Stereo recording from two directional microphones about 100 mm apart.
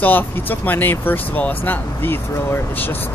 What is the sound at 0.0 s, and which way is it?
Speech, 20° left (ahead or behind).